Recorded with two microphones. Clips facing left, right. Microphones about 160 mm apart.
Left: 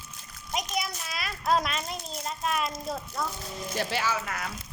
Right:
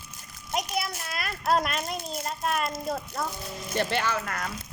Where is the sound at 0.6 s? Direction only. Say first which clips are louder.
Right 2 dB; 5° right (ahead or behind).